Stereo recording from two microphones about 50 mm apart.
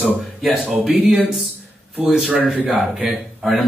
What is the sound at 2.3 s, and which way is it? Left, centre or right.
Speech, right.